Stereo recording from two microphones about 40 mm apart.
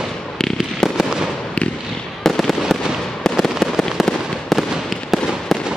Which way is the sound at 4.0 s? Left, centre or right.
Centre.